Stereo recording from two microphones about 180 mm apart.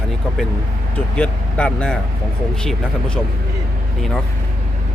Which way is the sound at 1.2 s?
5° left (ahead or behind).